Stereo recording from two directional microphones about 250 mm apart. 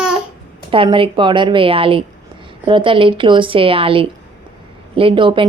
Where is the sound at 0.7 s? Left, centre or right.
Right.